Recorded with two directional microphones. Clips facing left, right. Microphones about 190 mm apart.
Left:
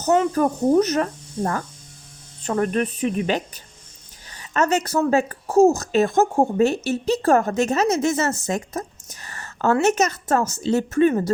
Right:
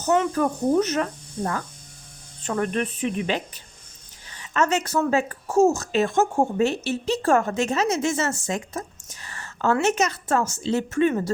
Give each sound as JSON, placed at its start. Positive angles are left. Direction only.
{"t": 0.0, "sound": "speech", "side_deg": 35}